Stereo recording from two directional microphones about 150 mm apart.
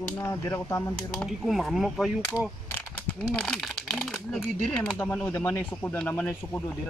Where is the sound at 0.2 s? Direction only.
20° left (ahead or behind).